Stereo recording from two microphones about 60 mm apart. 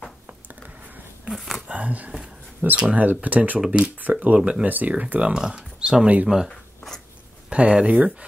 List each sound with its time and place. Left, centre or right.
0.8 s a sound: right
1.3 s speech: centre
1.7 s speech: right
4.4 s speech: centre
4.6 s speech: right; by 6.5 s centre
7.4 s speech: centre